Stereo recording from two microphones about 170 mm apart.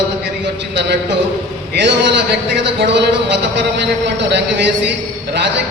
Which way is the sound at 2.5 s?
90° right.